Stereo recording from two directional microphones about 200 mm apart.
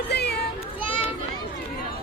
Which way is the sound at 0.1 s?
55° left (ahead or behind).